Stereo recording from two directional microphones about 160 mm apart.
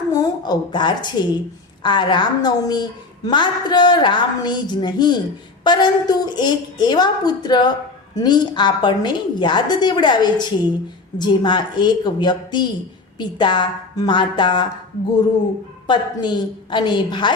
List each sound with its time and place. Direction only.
0.1 s a woman's voice: 25° left (ahead or behind)
15.9 s a woman's voice: 30° left (ahead or behind)